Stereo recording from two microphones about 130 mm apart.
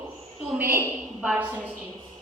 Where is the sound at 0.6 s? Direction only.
20° right (ahead or behind).